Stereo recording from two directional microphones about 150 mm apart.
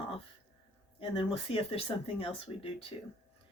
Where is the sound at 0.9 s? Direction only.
35° left (ahead or behind).